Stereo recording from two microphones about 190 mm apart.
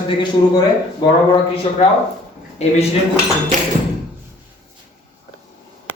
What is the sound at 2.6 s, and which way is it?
Speech, 35° left (ahead or behind).